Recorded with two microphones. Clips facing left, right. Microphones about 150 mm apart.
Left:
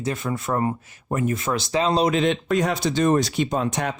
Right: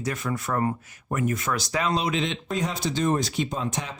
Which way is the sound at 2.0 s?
50° left (ahead or behind).